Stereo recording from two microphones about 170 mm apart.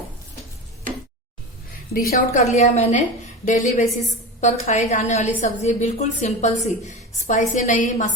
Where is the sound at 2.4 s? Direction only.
40° left (ahead or behind).